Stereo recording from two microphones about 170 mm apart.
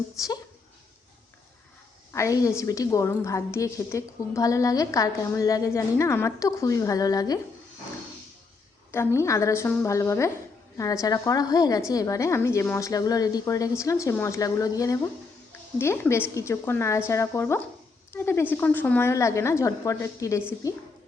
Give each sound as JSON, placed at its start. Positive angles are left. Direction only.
{"t": 0.2, "sound": "a woman's voice", "side_deg": 20}
{"t": 2.1, "sound": "a woman's voice", "side_deg": 20}
{"t": 8.9, "sound": "a woman's voice", "side_deg": 15}